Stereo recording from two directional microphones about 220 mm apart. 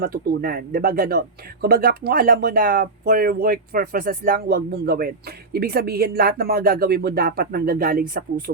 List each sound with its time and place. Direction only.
0.0 s speech: 40° right (ahead or behind)